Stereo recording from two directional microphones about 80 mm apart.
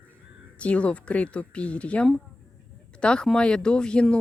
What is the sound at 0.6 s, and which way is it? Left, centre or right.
Speech, centre.